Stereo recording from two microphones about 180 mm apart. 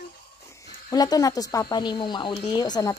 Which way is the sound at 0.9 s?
20° left (ahead or behind).